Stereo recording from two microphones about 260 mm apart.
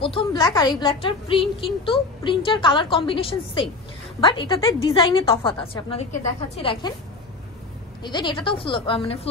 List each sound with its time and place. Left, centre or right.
0.0 s a woman's voice: centre
8.0 s a woman's voice: centre